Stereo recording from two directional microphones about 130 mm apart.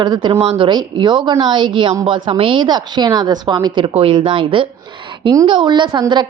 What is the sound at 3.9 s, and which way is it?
A woman's voice, 45° right (ahead or behind).